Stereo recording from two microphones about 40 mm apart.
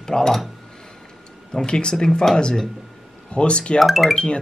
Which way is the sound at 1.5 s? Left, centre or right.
Left.